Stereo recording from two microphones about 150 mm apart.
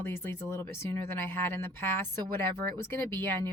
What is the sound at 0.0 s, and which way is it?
Speech, 15° left (ahead or behind).